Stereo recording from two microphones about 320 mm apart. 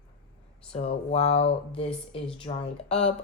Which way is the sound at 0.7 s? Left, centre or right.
Centre.